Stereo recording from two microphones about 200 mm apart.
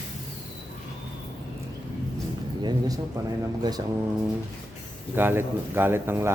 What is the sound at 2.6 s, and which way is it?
Speech, 20° right (ahead or behind).